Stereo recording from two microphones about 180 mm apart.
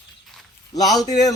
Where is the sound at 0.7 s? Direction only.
20° left (ahead or behind).